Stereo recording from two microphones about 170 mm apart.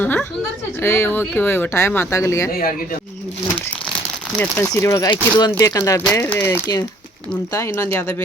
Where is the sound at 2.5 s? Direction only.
55° left (ahead or behind).